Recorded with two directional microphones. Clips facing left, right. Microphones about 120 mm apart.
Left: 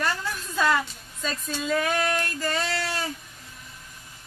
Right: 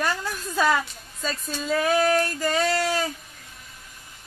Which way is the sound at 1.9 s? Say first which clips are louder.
Right 6 dB; 35° right (ahead or behind).